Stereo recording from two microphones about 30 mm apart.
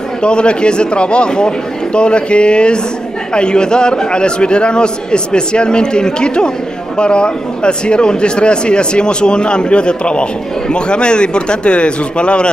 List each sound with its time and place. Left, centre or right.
0.2 s a man's voice: left